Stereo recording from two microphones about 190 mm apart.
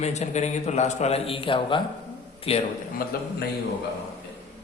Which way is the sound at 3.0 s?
50° left (ahead or behind).